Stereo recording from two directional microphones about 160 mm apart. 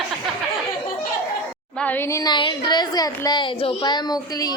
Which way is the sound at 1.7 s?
10° left (ahead or behind).